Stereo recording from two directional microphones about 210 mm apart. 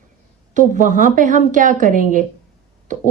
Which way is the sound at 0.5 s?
35° right (ahead or behind).